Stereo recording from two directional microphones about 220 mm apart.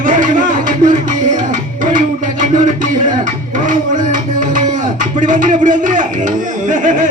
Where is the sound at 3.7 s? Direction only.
35° right (ahead or behind).